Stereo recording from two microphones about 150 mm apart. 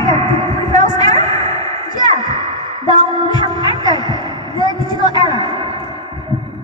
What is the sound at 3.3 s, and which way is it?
Music, 30° left (ahead or behind).